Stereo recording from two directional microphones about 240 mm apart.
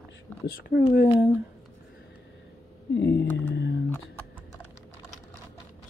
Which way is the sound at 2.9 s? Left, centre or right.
Left.